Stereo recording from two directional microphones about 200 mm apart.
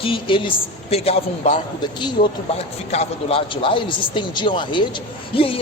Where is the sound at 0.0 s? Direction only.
25° left (ahead or behind).